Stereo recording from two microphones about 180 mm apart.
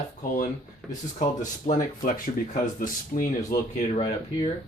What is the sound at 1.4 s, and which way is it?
Speech, 40° left (ahead or behind).